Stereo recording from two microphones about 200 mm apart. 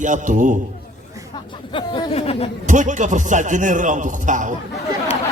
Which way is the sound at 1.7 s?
25° left (ahead or behind).